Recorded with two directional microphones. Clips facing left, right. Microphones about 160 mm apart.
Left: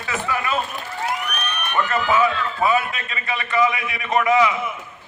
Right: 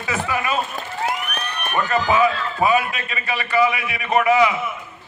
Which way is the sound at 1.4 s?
35° right (ahead or behind).